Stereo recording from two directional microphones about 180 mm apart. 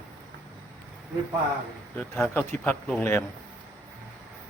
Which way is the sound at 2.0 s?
5° left (ahead or behind).